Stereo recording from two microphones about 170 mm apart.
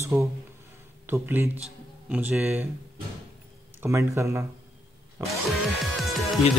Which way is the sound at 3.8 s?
15° right (ahead or behind).